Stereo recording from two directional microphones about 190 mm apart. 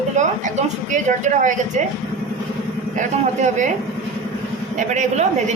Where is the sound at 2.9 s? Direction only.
40° right (ahead or behind).